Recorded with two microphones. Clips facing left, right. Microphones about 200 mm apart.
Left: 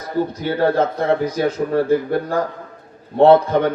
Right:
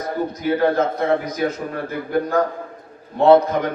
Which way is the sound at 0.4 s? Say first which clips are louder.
Right 1 dB; 30° left (ahead or behind).